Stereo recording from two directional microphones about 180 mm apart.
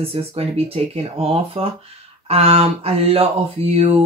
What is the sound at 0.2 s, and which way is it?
Speech, 30° right (ahead or behind).